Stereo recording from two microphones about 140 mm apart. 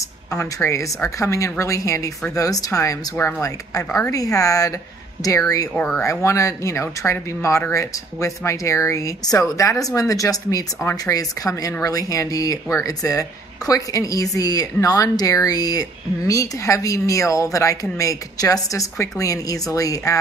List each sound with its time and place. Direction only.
0.3 s speech: 20° left (ahead or behind)
5.8 s speech: 10° left (ahead or behind)
6.0 s speech: 20° left (ahead or behind)